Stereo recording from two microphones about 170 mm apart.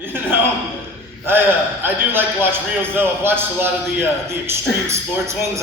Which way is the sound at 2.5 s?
15° right (ahead or behind).